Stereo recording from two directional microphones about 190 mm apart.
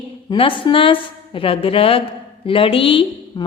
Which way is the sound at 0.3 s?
25° left (ahead or behind).